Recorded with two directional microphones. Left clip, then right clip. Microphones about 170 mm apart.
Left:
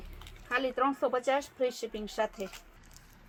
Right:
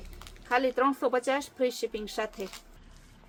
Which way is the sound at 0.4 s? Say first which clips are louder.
Right 4 dB; 30° right (ahead or behind).